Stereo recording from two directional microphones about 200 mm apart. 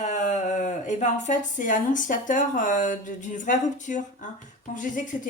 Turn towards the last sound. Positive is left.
turn(degrees=40)  # may be behind; listen again after turning